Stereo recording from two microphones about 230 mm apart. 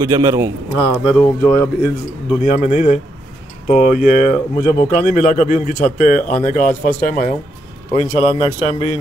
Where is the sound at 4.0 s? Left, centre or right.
Left.